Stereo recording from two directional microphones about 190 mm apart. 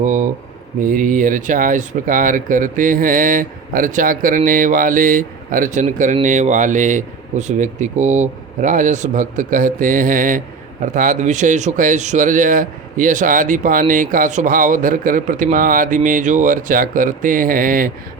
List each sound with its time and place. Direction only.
0.0 s a man's voice: 40° right (ahead or behind)